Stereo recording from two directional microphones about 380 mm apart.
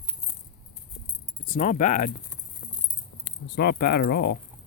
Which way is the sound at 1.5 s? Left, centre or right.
Left.